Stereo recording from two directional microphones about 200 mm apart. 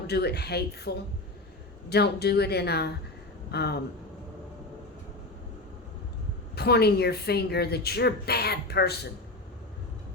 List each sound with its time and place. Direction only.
0.1 s a woman's voice: 55° left (ahead or behind)
6.6 s a woman's voice: 55° left (ahead or behind)